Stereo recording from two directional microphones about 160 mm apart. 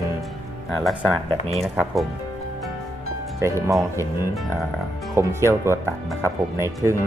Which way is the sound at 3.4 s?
15° right (ahead or behind).